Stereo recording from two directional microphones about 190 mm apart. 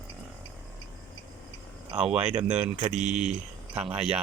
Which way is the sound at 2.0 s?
5° right (ahead or behind).